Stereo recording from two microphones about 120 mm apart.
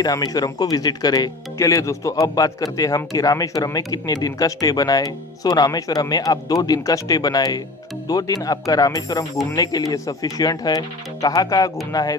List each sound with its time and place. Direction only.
0.0 s speech: 30° left (ahead or behind)